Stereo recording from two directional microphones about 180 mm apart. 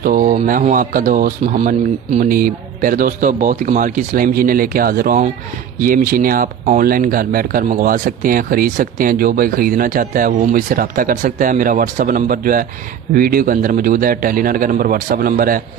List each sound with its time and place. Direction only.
0.0 s speech: 50° right (ahead or behind)